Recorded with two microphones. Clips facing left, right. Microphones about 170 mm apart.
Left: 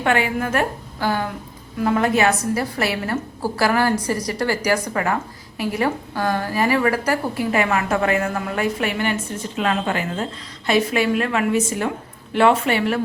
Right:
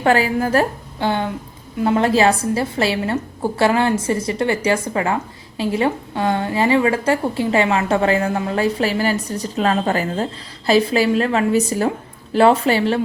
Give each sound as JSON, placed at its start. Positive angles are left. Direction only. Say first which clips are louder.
{"t": 0.0, "sound": "a woman's voice", "louder": "right 4 dB", "side_deg": -35}
{"t": 0.9, "sound": "a woman's voice", "louder": "right 2 dB", "side_deg": -20}